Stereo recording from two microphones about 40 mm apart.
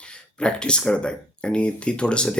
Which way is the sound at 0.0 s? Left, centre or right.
Left.